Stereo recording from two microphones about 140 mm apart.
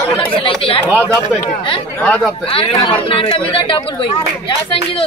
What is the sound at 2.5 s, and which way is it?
Speech, 40° left (ahead or behind).